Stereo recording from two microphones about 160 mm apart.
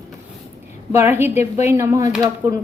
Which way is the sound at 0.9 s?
15° right (ahead or behind).